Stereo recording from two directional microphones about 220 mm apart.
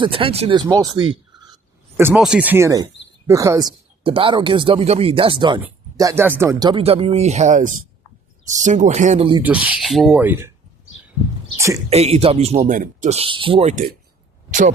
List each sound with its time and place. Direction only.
0.0 s speech: 25° right (ahead or behind)
2.0 s speech: 5° right (ahead or behind); by 9.4 s 25° right (ahead or behind)
9.4 s speech: 5° right (ahead or behind)
11.5 s a sound: 15° right (ahead or behind)
11.9 s speech: 30° right (ahead or behind)